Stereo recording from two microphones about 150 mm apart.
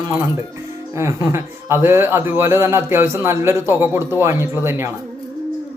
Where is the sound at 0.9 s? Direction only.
20° right (ahead or behind).